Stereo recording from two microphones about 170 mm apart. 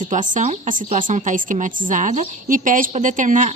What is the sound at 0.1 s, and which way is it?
A woman's voice, 45° right (ahead or behind).